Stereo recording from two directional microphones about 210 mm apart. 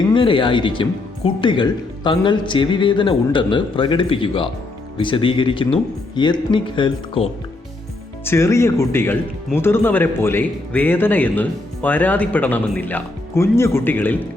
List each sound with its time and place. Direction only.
0.1 s speech: 25° left (ahead or behind)
8.2 s a man's voice: 10° left (ahead or behind)